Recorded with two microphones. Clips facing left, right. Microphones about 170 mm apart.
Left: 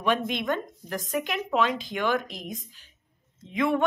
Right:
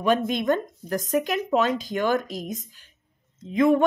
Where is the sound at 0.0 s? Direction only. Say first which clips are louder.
Right 4 dB; 40° right (ahead or behind).